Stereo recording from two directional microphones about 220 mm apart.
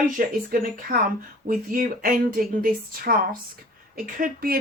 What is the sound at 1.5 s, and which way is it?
Speech, 40° right (ahead or behind).